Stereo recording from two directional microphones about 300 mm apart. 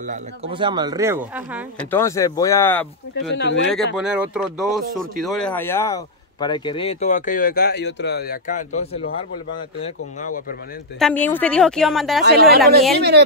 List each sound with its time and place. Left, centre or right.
0.0 s speech: right; by 1.6 s centre
1.9 s speech: centre
3.3 s speech: left
3.9 s speech: centre; by 10.4 s left
11.0 s speech: centre
12.2 s speech: right